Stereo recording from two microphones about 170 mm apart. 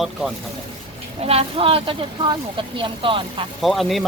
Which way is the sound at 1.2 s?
35° right (ahead or behind).